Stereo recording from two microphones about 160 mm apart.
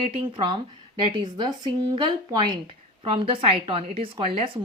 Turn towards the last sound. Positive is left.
turn(degrees=-35)  # may be behind; listen again after turning